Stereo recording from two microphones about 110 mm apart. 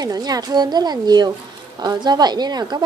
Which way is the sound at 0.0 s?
35° right (ahead or behind).